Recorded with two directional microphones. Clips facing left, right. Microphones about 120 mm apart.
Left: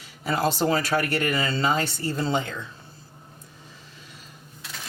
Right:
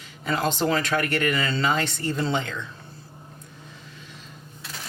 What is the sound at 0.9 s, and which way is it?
Speech, 25° left (ahead or behind).